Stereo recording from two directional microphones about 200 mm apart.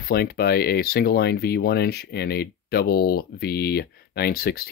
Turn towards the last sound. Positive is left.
turn(degrees=50)  # may be behind; listen again after turning